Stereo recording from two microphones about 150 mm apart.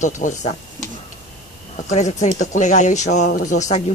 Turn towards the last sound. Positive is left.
turn(degrees=50)  # may be behind; listen again after turning